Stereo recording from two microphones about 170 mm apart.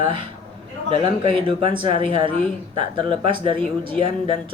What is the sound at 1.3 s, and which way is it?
Speech, 30° right (ahead or behind).